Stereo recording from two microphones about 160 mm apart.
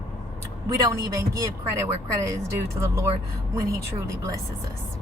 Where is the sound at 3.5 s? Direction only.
20° right (ahead or behind).